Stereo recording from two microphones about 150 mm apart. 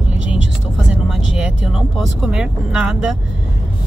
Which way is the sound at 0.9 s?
5° right (ahead or behind).